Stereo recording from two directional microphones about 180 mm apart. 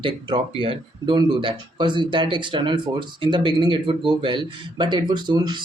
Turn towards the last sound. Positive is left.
turn(degrees=-25)  # may be behind; listen again after turning